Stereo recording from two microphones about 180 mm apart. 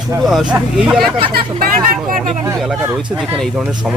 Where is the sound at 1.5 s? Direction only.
55° right (ahead or behind).